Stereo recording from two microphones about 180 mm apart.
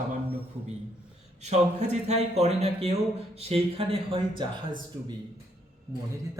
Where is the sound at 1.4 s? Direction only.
40° right (ahead or behind).